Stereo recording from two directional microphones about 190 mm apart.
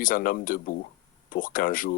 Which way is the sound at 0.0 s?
45° left (ahead or behind).